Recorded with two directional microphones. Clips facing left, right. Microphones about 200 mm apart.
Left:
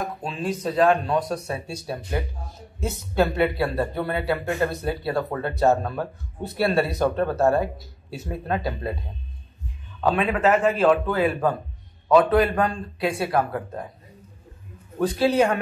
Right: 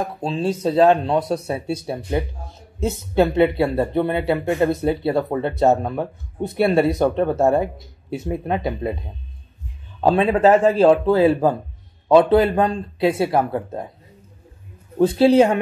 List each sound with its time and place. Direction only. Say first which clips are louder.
0.0 s speech: right 6 dB; 30° right (ahead or behind)
9.9 s a man's voice: right 5 dB; 30° right (ahead or behind)
15.0 s speech: right 6 dB; 30° right (ahead or behind)